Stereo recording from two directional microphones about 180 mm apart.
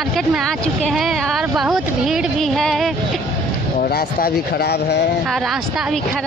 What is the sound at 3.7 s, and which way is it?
Speech, 60° left (ahead or behind).